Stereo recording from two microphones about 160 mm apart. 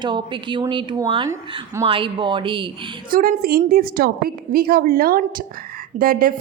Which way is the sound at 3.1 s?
60° right (ahead or behind).